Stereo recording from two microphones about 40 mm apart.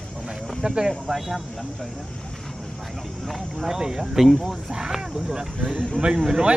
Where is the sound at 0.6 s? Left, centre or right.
Right.